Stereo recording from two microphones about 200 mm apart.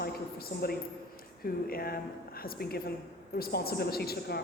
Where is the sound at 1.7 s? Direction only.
50° left (ahead or behind).